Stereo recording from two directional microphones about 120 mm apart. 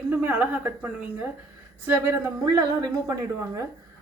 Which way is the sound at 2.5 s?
25° right (ahead or behind).